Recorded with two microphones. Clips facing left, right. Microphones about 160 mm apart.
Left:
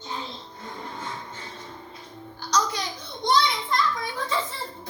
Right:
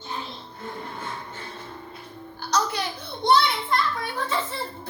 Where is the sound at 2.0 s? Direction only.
60° right (ahead or behind).